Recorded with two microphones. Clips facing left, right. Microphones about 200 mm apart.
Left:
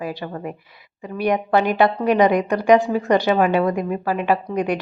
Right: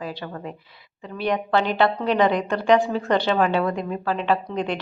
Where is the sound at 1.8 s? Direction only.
15° left (ahead or behind).